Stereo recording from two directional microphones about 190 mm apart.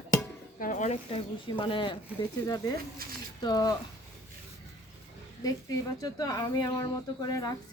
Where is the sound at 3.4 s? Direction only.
20° left (ahead or behind).